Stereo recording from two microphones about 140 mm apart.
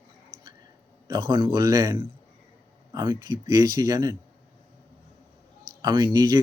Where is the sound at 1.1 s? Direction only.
30° right (ahead or behind).